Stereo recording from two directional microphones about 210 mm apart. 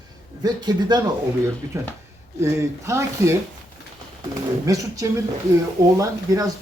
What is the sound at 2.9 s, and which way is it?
Speech, 15° right (ahead or behind).